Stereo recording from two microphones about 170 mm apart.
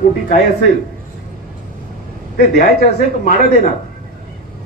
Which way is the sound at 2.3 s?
65° left (ahead or behind).